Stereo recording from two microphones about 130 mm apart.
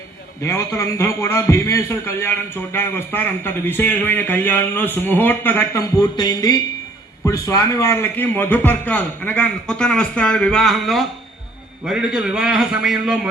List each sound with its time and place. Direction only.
0.4 s a man's voice: 20° left (ahead or behind)
5.8 s a sound: 30° left (ahead or behind)
7.3 s a man's voice: 25° left (ahead or behind); by 13.3 s 5° right (ahead or behind)